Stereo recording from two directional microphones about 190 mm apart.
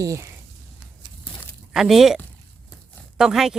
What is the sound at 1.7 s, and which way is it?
Speech, centre (ahead or behind).